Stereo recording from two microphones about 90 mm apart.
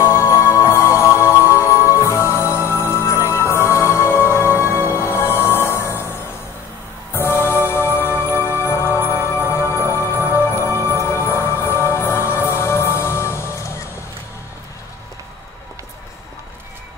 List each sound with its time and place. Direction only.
0.0 s music: 30° left (ahead or behind)
7.2 s music: 25° left (ahead or behind)